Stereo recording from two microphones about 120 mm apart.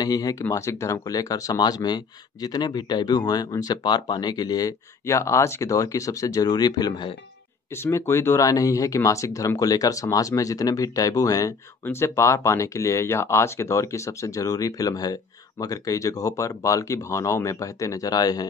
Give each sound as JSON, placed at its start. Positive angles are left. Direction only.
{"t": 0.0, "sound": "speech", "side_deg": 30}
{"t": 7.7, "sound": "speech", "side_deg": 20}